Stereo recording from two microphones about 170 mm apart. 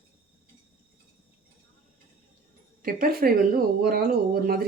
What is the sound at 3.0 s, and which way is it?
Speech, 60° right (ahead or behind).